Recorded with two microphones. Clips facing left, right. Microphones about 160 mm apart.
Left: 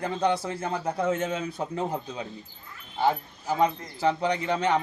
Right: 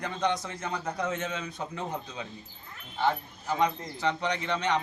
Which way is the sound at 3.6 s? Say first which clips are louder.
Left 4 dB; 30° left (ahead or behind).